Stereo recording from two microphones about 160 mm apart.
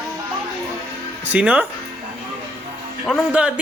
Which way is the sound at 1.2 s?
10° right (ahead or behind).